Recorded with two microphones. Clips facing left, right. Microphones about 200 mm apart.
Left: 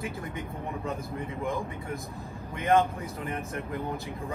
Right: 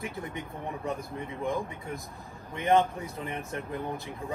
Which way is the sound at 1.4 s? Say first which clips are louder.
Right 2 dB; 15° right (ahead or behind).